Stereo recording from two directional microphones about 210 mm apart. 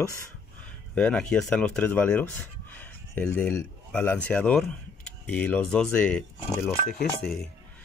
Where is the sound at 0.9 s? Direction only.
5° left (ahead or behind).